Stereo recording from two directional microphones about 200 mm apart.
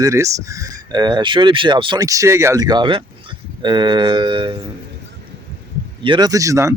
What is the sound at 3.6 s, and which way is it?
Mantra, 20° right (ahead or behind).